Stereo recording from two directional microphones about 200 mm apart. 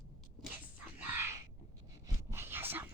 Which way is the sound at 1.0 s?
10° right (ahead or behind).